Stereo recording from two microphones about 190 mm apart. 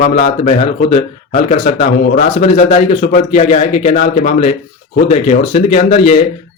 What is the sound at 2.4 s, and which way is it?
Speech, 35° left (ahead or behind).